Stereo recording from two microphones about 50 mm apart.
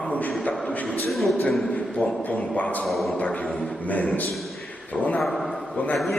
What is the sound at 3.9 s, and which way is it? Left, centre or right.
Speech, left.